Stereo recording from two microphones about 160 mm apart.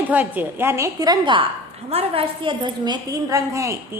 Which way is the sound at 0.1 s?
10° right (ahead or behind).